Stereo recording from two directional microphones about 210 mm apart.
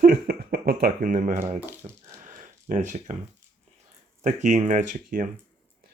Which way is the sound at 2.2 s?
35° right (ahead or behind).